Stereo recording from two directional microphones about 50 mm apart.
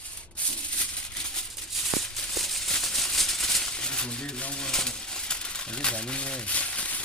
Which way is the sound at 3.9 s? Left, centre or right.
Centre.